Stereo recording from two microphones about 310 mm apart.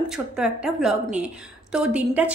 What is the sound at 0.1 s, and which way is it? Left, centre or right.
A woman's voice, centre.